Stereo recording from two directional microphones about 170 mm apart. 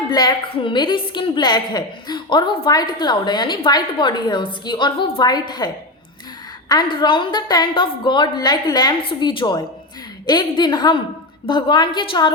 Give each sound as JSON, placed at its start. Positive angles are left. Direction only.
{"t": 0.1, "sound": "a woman's voice", "side_deg": 25}